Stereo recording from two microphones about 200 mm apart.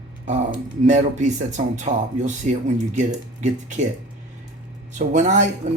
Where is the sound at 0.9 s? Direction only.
35° right (ahead or behind).